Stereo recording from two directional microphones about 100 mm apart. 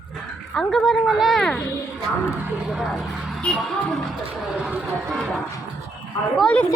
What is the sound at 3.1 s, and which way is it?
Music, 5° right (ahead or behind).